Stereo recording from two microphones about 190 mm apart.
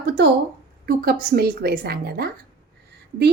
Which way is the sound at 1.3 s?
55° right (ahead or behind).